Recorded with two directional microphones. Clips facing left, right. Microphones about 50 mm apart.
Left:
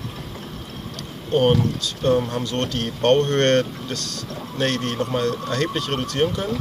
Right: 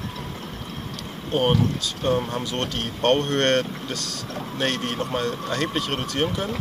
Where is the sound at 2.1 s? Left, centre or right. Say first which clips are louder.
Left 3 dB; centre.